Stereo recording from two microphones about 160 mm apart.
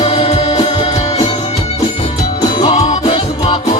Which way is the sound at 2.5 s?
40° left (ahead or behind).